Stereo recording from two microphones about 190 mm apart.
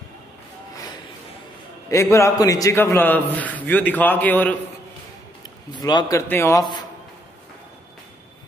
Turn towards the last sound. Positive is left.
turn(degrees=20)  # may be behind; listen again after turning